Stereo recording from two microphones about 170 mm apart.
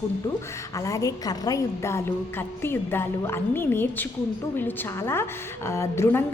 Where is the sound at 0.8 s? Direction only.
20° left (ahead or behind).